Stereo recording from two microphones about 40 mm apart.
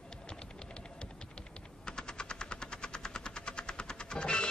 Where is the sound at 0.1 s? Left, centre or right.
Left.